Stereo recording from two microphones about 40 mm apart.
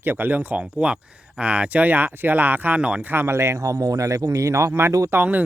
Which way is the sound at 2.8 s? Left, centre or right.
Right.